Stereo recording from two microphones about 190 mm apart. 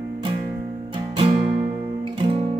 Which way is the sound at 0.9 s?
25° right (ahead or behind).